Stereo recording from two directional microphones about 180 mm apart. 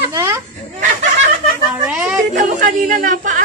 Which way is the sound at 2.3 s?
45° right (ahead or behind).